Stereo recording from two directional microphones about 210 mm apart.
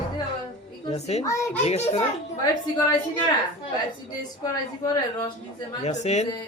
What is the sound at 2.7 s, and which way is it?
Speech, 20° left (ahead or behind).